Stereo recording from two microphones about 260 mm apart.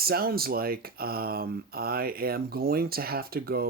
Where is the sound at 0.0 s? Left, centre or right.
Right.